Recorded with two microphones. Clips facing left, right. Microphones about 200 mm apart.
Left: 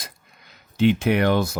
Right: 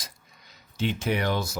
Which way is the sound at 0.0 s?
55° left (ahead or behind).